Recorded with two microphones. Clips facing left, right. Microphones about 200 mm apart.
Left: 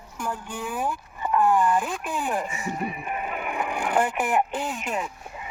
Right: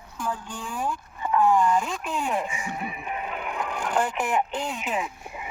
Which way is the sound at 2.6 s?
40° left (ahead or behind).